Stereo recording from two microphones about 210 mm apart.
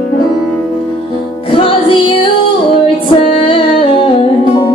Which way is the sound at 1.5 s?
25° left (ahead or behind).